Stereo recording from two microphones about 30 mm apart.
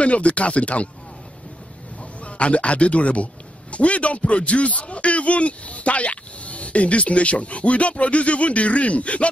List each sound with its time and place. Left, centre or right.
0.0 s speech: left
2.2 s speech: left